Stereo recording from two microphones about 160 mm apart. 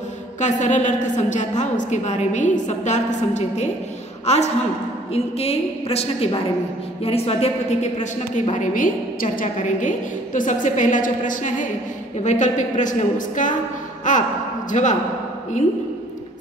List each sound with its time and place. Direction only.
0.4 s a woman's voice: 50° left (ahead or behind)